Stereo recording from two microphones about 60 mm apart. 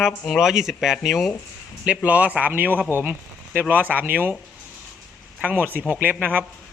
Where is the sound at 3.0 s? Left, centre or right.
Right.